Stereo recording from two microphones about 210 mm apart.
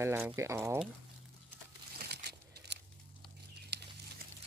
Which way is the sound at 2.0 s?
50° right (ahead or behind).